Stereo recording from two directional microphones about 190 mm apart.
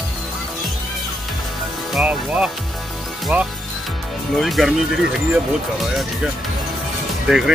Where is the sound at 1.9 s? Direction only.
5° right (ahead or behind).